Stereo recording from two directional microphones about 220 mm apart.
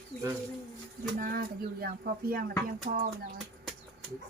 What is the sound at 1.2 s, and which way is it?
Speech, 40° right (ahead or behind).